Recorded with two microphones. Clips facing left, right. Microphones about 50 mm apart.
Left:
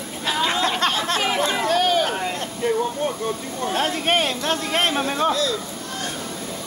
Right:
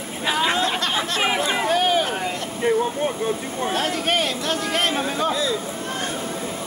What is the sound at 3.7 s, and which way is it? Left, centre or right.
Speech, left.